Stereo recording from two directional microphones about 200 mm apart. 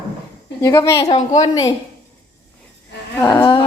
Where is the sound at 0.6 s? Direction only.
15° left (ahead or behind).